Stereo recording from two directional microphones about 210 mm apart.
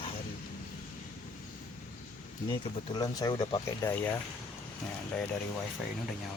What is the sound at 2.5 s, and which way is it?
Speech, 20° left (ahead or behind).